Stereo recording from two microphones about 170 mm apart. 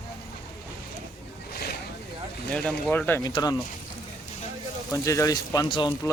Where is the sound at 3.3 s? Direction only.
20° left (ahead or behind).